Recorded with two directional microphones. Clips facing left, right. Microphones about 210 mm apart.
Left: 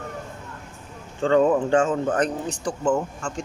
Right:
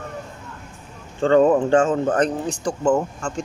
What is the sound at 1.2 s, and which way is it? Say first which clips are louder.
Speech: right 3 dB; 40° right (ahead or behind).